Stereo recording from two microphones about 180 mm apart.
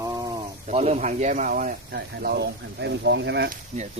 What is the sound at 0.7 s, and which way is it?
Speech, 35° right (ahead or behind).